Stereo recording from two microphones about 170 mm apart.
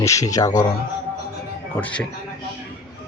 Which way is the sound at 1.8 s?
10° left (ahead or behind).